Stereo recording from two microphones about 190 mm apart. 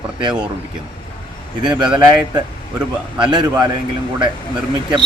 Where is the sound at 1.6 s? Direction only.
25° right (ahead or behind).